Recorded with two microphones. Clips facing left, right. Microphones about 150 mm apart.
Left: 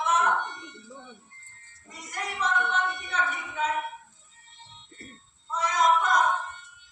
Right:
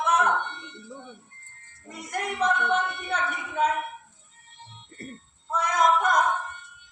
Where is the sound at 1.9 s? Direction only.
55° right (ahead or behind).